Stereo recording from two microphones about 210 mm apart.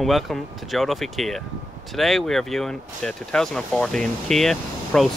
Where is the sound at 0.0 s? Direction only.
Centre (ahead or behind).